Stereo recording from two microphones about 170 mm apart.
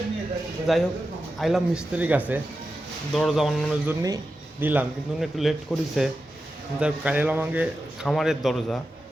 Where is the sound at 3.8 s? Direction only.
20° right (ahead or behind).